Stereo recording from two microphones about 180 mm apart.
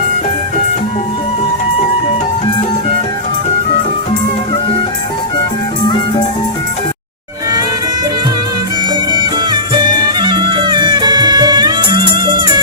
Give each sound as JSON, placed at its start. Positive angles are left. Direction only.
{"t": 9.1, "sound": "music", "side_deg": -25}